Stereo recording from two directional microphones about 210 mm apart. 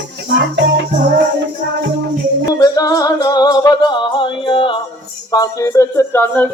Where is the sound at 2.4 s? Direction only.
15° left (ahead or behind).